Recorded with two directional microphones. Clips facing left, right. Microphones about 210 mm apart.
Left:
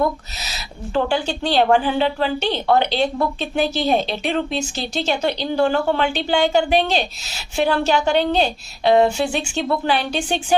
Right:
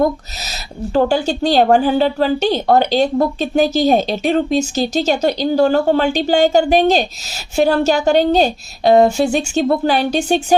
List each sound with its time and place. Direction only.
0.9 s a woman's voice: 40° right (ahead or behind)